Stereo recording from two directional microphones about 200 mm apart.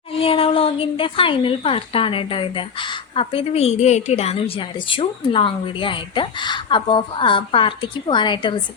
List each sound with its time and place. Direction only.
0.1 s speech: 30° left (ahead or behind)